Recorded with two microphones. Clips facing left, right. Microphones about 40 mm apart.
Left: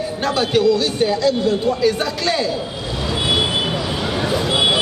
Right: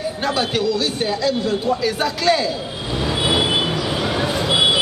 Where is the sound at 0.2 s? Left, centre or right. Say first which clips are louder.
Left 4 dB; centre.